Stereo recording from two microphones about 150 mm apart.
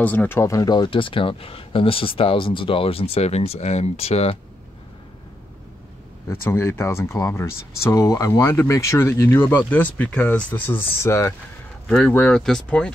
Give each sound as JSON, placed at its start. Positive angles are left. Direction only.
{"t": 0.0, "sound": "speech", "side_deg": 10}
{"t": 6.4, "sound": "speech", "side_deg": 15}
{"t": 11.9, "sound": "speech", "side_deg": 5}